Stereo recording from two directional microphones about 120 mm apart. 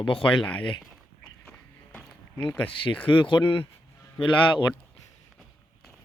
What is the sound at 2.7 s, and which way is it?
Speech, 45° left (ahead or behind).